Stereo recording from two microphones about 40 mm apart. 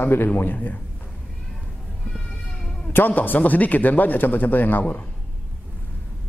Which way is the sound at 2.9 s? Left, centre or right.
Left.